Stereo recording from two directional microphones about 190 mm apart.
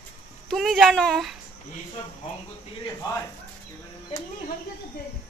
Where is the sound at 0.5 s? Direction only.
Centre (ahead or behind).